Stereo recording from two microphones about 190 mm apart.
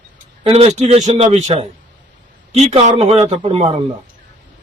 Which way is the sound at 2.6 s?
35° right (ahead or behind).